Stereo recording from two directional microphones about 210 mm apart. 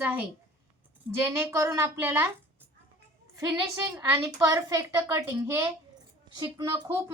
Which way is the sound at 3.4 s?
15° right (ahead or behind).